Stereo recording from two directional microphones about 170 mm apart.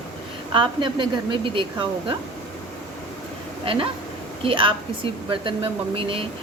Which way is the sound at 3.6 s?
30° right (ahead or behind).